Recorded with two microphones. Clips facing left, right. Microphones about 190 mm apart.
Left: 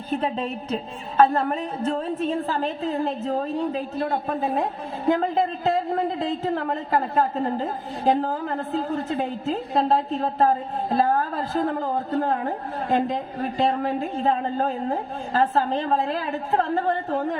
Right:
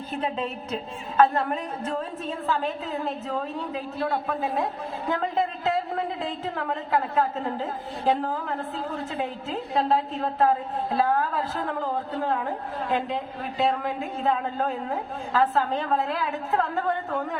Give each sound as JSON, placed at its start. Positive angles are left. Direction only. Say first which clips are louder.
{"t": 0.2, "sound": "a woman's voice", "louder": "left 2 dB", "side_deg": 35}